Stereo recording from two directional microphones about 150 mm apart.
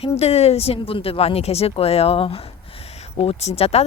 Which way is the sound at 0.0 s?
45° left (ahead or behind).